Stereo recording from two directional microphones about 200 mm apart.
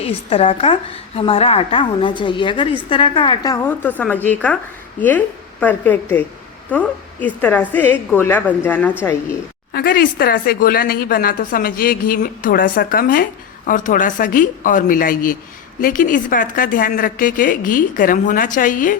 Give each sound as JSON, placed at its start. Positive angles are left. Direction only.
{"t": 0.0, "sound": "a woman's voice", "side_deg": 30}
{"t": 9.7, "sound": "a woman's voice", "side_deg": 45}